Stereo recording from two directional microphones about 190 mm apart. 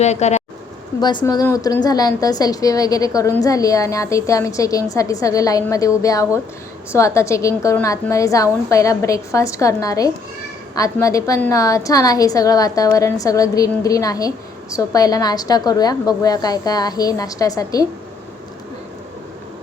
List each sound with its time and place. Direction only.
0.0 s speech: 35° left (ahead or behind)
1.0 s a woman's voice: 20° left (ahead or behind)